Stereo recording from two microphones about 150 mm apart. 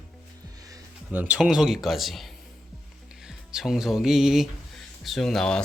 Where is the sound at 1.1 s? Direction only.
10° right (ahead or behind).